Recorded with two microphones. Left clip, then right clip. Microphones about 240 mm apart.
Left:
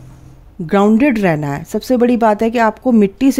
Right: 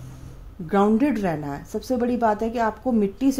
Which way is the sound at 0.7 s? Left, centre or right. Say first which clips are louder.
Left 8 dB; left.